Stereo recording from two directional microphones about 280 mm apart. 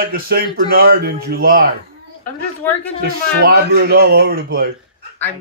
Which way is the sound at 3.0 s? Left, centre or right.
Right.